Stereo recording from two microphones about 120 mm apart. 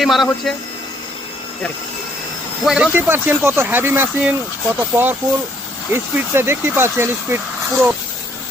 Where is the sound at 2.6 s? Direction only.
10° right (ahead or behind).